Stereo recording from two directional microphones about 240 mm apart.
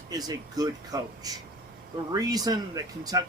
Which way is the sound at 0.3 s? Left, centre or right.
Centre.